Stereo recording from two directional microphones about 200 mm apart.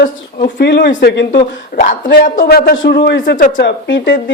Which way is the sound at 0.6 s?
60° left (ahead or behind).